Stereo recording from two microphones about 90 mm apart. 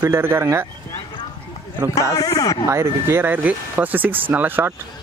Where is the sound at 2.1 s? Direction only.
40° left (ahead or behind).